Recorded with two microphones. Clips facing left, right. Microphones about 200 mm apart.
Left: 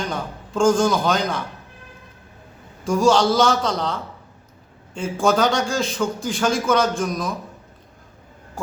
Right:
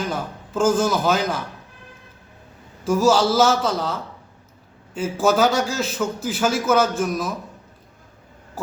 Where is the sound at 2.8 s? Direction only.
5° right (ahead or behind).